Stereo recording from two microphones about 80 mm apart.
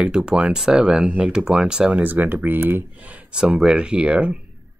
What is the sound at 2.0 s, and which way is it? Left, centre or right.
Speech, right.